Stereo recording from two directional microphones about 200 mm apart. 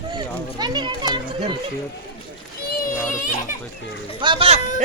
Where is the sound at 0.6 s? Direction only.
20° right (ahead or behind).